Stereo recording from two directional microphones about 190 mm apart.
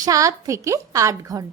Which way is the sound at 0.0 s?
15° right (ahead or behind).